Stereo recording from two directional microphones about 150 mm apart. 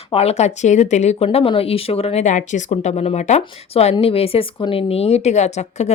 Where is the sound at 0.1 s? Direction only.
45° left (ahead or behind).